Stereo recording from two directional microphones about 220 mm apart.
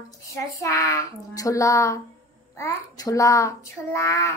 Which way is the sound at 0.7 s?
15° left (ahead or behind).